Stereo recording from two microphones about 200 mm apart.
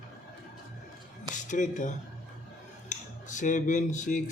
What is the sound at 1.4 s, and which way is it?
Speech, 40° left (ahead or behind).